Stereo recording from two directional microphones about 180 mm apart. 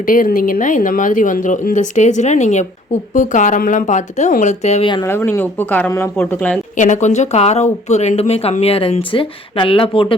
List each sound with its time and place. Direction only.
0.0 s speech: 50° left (ahead or behind)
5.0 s speech: 15° left (ahead or behind)
6.7 s speech: 45° left (ahead or behind)